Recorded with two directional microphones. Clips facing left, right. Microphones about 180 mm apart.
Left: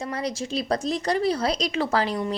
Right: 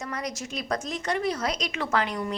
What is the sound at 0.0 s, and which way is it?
A woman's voice, 30° left (ahead or behind).